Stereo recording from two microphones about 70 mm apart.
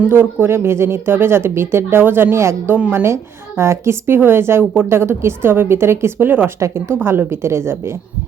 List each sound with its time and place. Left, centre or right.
0.1 s speech: right